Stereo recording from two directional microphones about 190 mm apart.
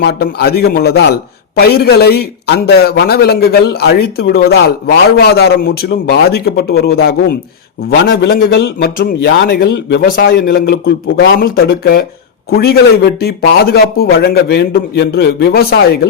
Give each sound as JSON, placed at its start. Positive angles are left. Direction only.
{"t": 0.0, "sound": "speech", "side_deg": 60}
{"t": 7.9, "sound": "speech", "side_deg": 65}